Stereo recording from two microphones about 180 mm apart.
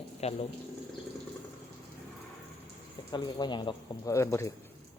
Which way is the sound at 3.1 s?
25° left (ahead or behind).